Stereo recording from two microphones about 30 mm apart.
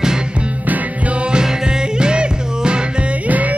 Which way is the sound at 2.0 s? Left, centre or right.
Right.